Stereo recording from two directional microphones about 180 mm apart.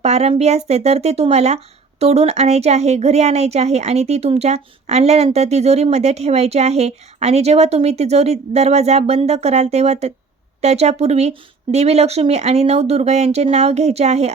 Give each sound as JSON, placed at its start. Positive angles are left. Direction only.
{"t": 0.0, "sound": "speech", "side_deg": -35}